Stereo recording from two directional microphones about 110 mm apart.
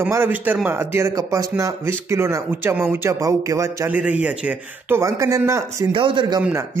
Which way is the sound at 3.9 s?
10° right (ahead or behind).